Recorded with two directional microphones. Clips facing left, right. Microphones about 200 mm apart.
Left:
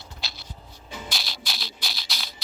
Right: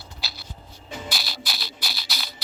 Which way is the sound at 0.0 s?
5° right (ahead or behind).